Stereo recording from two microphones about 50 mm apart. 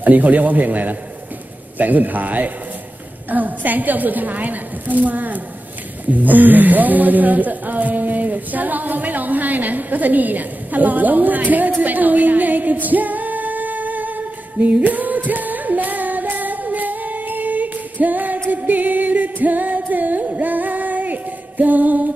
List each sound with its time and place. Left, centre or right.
0.0 s speech: right
11.8 s singing: right